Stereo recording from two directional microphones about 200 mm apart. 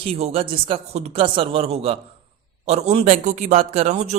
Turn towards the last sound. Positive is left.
turn(degrees=-35)  # may be behind; listen again after turning